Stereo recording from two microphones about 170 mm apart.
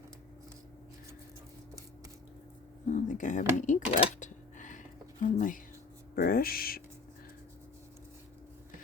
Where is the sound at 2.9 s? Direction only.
50° left (ahead or behind).